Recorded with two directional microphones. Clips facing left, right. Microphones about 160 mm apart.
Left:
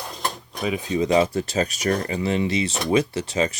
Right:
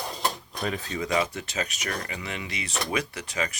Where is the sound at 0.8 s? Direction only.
20° left (ahead or behind).